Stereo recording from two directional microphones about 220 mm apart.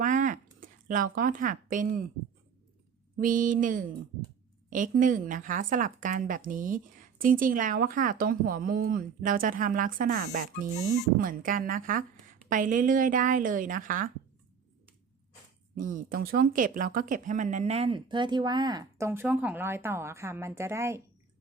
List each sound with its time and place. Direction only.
0.0 s a sound: 35° right (ahead or behind)
1.7 s speech: 35° right (ahead or behind)
3.2 s speech: 40° right (ahead or behind)
15.7 s speech: 35° right (ahead or behind); by 21.0 s 10° right (ahead or behind)